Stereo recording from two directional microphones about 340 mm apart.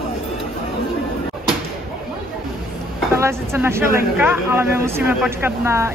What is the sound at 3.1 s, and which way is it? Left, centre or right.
Speech, centre.